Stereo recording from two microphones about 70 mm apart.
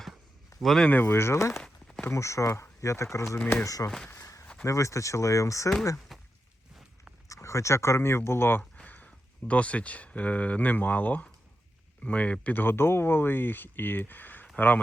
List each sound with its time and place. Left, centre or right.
0.6 s speech: centre
0.9 s speech: left
4.2 s a sound: left
4.6 s speech: left
6.1 s a sound: centre
7.3 s speech: left
8.7 s speech: left